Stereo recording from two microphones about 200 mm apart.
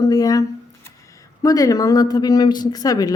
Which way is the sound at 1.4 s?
15° left (ahead or behind).